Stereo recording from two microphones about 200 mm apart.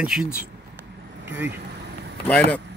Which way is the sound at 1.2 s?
10° right (ahead or behind).